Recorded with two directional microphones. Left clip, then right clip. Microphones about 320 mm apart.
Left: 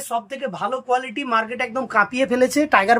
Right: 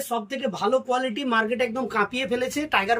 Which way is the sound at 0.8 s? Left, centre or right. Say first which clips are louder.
Left 3 dB; centre.